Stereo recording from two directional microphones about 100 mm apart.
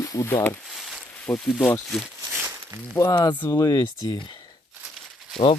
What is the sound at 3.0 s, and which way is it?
Speech, 45° left (ahead or behind).